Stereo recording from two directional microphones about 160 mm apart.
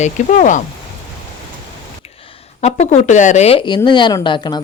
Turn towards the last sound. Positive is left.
turn(degrees=30)  # may be behind; listen again after turning